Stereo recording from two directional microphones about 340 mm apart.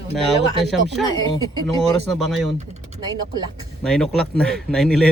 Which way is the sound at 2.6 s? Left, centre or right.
Centre.